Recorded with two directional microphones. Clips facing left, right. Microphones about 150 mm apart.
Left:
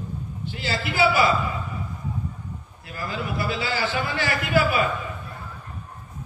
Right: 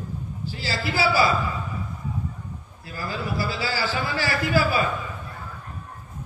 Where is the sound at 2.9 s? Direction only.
30° right (ahead or behind).